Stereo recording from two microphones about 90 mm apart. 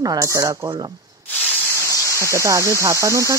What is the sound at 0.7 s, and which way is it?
Speech, 50° right (ahead or behind).